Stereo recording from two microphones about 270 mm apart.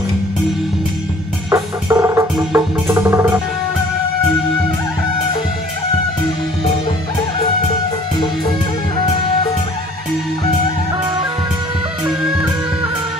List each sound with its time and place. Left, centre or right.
1.5 s music: centre